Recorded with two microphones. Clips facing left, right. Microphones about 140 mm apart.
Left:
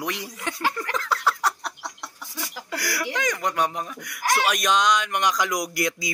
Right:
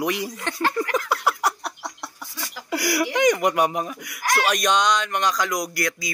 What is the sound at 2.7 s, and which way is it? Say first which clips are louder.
Speech: right 6 dB; 15° right (ahead or behind).